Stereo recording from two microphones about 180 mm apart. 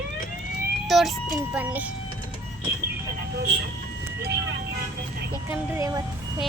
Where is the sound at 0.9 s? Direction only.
Centre (ahead or behind).